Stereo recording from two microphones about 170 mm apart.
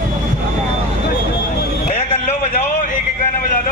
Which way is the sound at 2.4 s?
50° left (ahead or behind).